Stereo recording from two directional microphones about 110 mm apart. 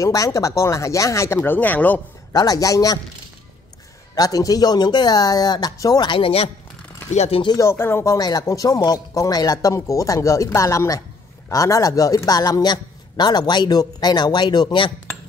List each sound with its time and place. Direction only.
0.0 s speech: 30° left (ahead or behind); by 2.0 s 15° left (ahead or behind)
2.3 s a man's voice: 35° left (ahead or behind)
4.1 s a man's voice: 35° left (ahead or behind)
6.0 s speech: 55° left (ahead or behind)
7.1 s speech: 85° left
7.5 s a man's voice: 25° left (ahead or behind); by 14.9 s 45° left (ahead or behind)